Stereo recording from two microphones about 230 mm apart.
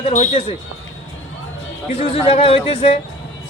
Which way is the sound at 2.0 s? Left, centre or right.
Left.